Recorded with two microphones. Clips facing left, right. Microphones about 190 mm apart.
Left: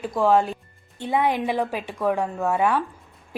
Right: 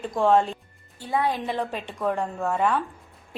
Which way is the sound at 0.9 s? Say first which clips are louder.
Left 3 dB; 20° left (ahead or behind).